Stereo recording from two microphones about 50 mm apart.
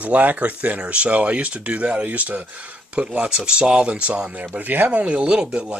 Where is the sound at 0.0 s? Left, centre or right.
Right.